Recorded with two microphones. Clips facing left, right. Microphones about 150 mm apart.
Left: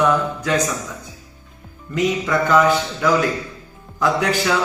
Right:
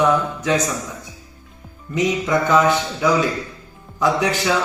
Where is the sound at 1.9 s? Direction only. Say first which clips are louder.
Even; 15° right (ahead or behind).